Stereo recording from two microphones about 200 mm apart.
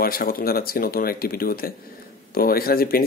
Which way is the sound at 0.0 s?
45° left (ahead or behind).